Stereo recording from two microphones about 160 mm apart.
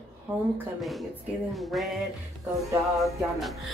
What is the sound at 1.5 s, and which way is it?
Speech, centre (ahead or behind).